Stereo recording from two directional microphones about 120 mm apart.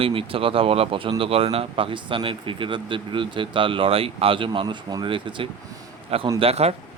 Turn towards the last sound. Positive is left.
turn(degrees=-55)  # may be behind; listen again after turning